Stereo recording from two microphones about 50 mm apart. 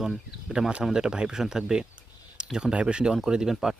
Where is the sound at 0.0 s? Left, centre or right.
Centre.